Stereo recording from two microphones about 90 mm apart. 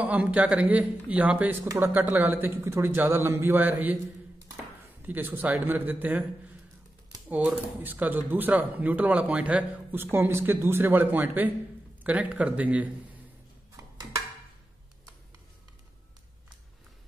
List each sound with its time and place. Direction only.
0.0 s speech: 15° right (ahead or behind)
1.7 s speech: 25° right (ahead or behind)
5.0 s speech: 20° right (ahead or behind)
7.2 s speech: 15° right (ahead or behind)